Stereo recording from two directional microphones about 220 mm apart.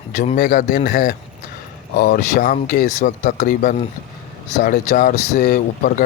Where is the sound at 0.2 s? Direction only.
35° left (ahead or behind).